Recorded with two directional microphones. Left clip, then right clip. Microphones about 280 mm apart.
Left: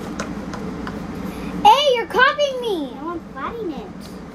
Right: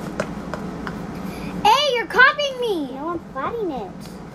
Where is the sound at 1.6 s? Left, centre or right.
Centre.